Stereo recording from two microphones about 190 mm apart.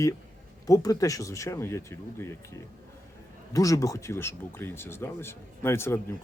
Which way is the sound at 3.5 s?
15° left (ahead or behind).